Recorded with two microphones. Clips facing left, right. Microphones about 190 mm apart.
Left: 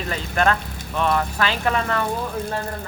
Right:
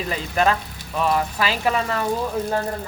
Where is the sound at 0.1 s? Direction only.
5° right (ahead or behind).